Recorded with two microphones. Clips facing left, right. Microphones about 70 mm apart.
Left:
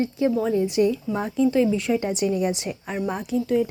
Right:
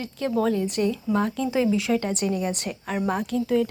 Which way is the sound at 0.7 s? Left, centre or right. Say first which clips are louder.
Left 2 dB; centre.